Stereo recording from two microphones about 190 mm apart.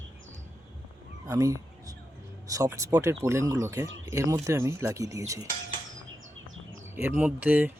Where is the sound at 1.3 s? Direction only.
15° right (ahead or behind).